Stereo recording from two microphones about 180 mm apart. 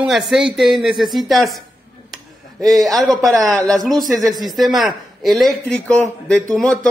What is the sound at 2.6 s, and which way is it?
Speech, centre (ahead or behind).